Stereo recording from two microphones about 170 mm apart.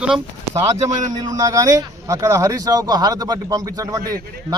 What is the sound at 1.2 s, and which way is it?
Speech, 20° right (ahead or behind).